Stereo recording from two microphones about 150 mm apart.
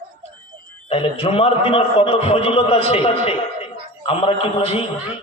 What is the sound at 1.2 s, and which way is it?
A man's voice, 40° left (ahead or behind).